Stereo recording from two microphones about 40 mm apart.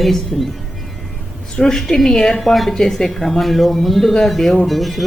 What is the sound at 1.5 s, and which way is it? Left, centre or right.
Speech, centre.